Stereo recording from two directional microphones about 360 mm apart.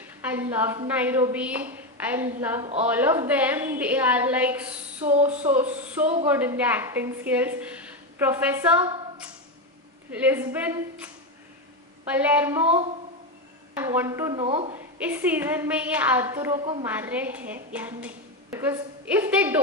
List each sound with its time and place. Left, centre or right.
0.0 s a woman's voice: centre
5.5 s a sound: centre
6.2 s a woman's voice: centre
12.1 s a woman's voice: centre
13.7 s a woman's voice: centre
15.0 s a woman's voice: centre